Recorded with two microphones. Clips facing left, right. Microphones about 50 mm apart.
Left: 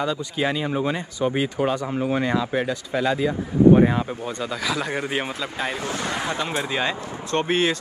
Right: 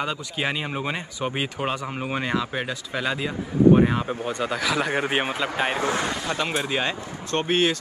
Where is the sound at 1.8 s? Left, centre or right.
Right.